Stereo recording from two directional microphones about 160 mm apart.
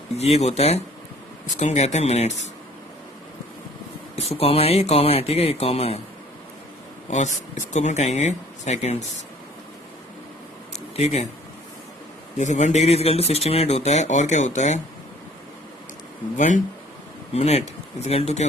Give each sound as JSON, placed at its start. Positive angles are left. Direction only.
{"t": 0.2, "sound": "speech", "side_deg": 40}
{"t": 4.1, "sound": "speech", "side_deg": 40}
{"t": 7.1, "sound": "speech", "side_deg": 45}
{"t": 10.9, "sound": "speech", "side_deg": 40}
{"t": 12.4, "sound": "speech", "side_deg": 45}
{"t": 17.3, "sound": "speech", "side_deg": 40}